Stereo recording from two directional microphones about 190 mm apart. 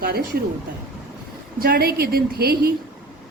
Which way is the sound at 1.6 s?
50° right (ahead or behind).